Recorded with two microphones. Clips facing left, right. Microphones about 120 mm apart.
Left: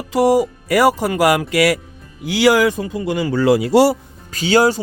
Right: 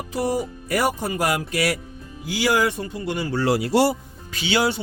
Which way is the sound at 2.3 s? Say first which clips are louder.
Left 7 dB; 80° left.